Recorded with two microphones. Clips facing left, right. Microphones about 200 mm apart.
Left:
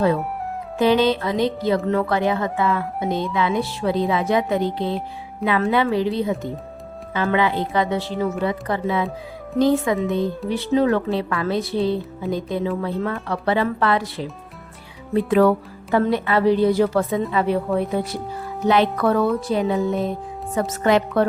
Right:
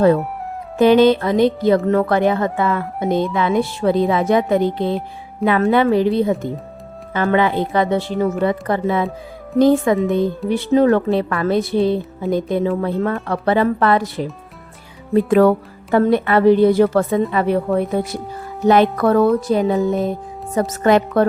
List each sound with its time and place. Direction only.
0.8 s speech: 50° right (ahead or behind)
15.3 s a woman's voice: 50° right (ahead or behind)